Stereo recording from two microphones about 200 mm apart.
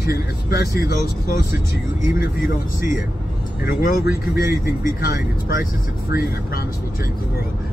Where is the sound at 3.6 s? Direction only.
50° left (ahead or behind).